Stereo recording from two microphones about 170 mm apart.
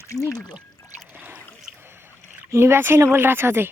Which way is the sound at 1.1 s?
10° right (ahead or behind).